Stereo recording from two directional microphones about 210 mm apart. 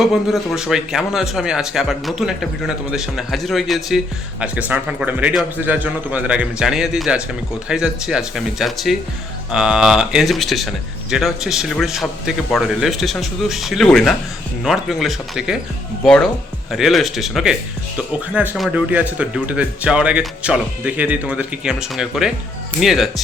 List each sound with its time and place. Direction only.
0.0 s speech: centre (ahead or behind)